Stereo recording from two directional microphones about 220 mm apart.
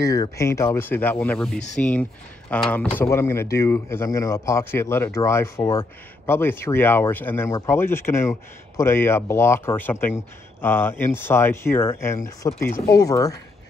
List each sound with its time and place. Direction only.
0.0 s speech: 15° left (ahead or behind)
1.5 s speech: 30° left (ahead or behind)
1.8 s speech: 5° left (ahead or behind)